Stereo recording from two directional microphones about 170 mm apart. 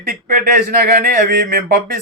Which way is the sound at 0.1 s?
55° right (ahead or behind).